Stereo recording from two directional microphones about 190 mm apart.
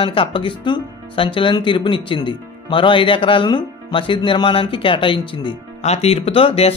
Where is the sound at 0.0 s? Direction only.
30° left (ahead or behind).